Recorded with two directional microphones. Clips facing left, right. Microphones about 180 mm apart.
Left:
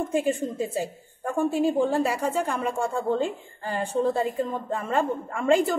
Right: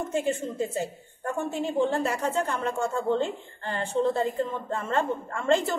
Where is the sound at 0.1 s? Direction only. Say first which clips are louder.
Left 3 dB; 10° left (ahead or behind).